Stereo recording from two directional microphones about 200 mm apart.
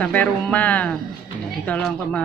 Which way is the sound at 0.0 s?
5° left (ahead or behind).